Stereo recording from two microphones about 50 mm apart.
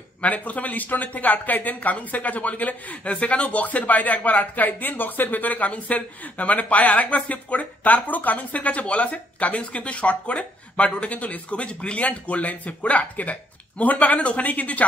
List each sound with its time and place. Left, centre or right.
0.2 s speech: left